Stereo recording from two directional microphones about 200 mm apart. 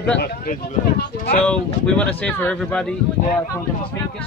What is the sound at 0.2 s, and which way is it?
Speech, 50° left (ahead or behind).